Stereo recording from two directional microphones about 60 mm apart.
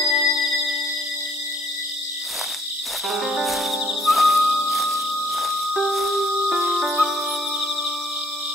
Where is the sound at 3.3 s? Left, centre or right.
Centre.